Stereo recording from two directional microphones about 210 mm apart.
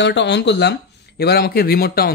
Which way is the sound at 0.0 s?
55° left (ahead or behind).